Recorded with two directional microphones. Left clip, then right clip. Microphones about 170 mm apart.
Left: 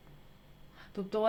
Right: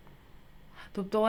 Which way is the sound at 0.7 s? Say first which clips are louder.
Right 4 dB; 30° right (ahead or behind).